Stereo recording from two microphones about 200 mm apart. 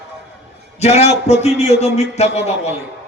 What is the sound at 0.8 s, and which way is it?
Speech, 30° left (ahead or behind).